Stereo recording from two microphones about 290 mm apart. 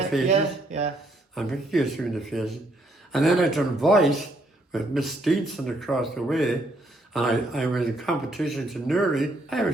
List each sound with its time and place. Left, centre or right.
0.3 s speech: right
1.4 s speech: centre